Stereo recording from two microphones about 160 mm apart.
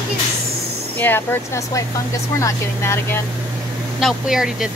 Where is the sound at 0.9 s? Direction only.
15° left (ahead or behind).